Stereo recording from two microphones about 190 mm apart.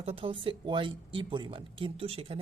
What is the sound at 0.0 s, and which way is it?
Speech, 30° right (ahead or behind).